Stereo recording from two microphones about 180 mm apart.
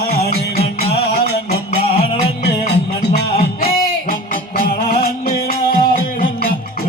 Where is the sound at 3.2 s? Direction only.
55° left (ahead or behind).